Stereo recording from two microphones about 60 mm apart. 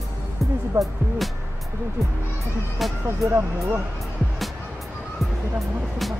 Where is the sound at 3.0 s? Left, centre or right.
Right.